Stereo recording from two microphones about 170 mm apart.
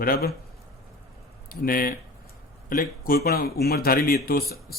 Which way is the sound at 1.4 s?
60° left (ahead or behind).